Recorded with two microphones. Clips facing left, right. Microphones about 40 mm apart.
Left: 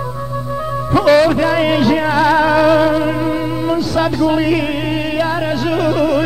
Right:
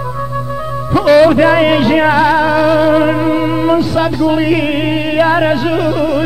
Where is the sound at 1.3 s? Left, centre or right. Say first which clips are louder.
Right 5 dB; right.